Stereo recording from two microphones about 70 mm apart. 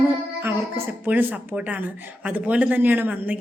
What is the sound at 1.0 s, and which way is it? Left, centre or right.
Speech, right.